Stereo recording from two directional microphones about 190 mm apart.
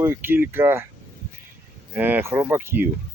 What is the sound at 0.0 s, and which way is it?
Speech, 10° right (ahead or behind).